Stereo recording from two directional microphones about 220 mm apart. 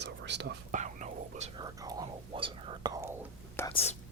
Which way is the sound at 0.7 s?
35° right (ahead or behind).